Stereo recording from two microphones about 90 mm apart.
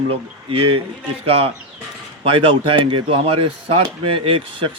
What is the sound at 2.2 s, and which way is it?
Speech, 90° right.